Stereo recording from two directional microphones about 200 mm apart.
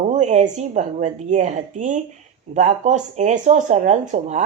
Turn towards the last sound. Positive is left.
turn(degrees=-35)  # may be behind; listen again after turning